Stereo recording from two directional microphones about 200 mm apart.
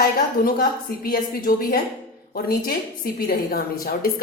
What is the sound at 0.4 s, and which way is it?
A woman's voice, 45° left (ahead or behind).